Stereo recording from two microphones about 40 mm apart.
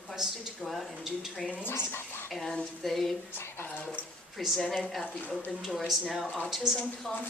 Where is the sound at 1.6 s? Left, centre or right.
Left.